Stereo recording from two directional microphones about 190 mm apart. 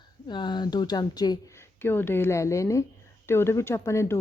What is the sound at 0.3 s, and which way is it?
A woman's voice, 25° left (ahead or behind).